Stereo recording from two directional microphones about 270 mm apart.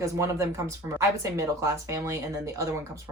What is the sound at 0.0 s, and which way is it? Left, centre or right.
Speech, centre.